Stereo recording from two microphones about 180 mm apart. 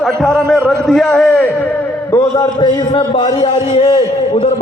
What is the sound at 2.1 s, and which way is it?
A man's voice, 25° left (ahead or behind).